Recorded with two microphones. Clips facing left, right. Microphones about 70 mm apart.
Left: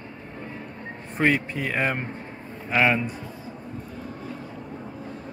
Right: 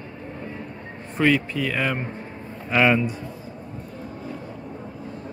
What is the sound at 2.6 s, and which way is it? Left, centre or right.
Speech, centre.